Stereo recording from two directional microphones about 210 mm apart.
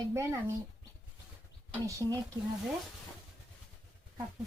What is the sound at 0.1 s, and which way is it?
Speech, 15° right (ahead or behind).